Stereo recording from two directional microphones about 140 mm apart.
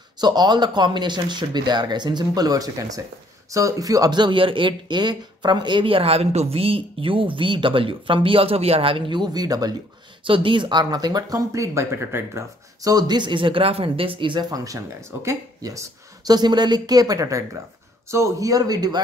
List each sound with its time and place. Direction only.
0.2 s speech: 30° right (ahead or behind)
10.2 s speech: 40° right (ahead or behind)